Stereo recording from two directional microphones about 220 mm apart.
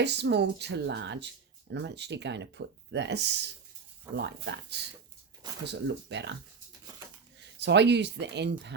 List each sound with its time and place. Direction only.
0.0 s speech: 50° right (ahead or behind)
4.1 s speech: 10° right (ahead or behind)
4.4 s speech: 50° right (ahead or behind)
7.6 s speech: 50° right (ahead or behind)